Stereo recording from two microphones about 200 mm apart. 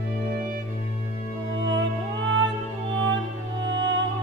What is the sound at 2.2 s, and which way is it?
Music, 65° right (ahead or behind).